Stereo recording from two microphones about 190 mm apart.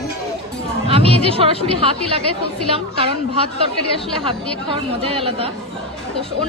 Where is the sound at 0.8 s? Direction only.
30° right (ahead or behind).